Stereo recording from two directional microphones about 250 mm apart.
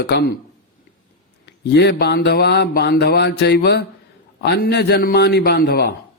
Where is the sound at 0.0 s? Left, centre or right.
Left.